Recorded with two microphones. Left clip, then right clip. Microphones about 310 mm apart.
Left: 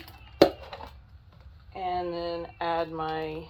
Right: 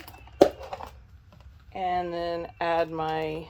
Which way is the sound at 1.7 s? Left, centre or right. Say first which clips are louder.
Right 3 dB; right.